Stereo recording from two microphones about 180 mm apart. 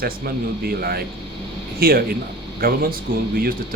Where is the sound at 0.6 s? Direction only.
60° right (ahead or behind).